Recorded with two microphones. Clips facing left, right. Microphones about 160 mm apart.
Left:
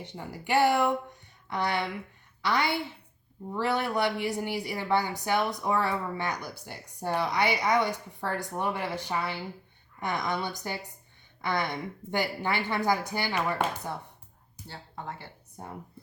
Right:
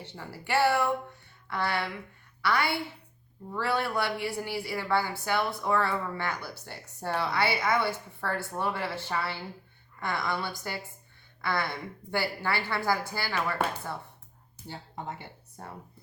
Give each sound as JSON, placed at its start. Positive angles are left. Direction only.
{"t": 0.0, "sound": "a woman's voice", "side_deg": 15}
{"t": 14.7, "sound": "speech", "side_deg": -20}
{"t": 15.6, "sound": "a woman's voice", "side_deg": 15}